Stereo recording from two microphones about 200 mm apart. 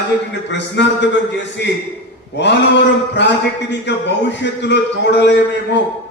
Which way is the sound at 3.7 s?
60° left (ahead or behind).